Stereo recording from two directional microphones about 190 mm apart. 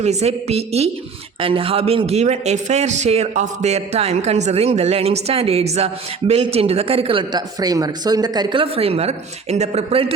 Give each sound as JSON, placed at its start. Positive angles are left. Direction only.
{"t": 0.0, "sound": "speech", "side_deg": -35}